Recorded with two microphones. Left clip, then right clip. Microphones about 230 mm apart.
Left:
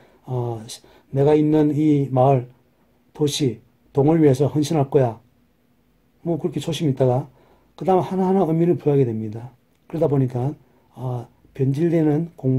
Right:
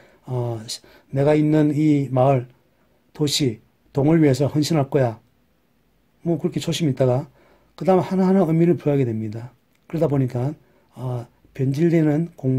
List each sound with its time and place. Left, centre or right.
0.0 s a man's voice: right
6.2 s a man's voice: right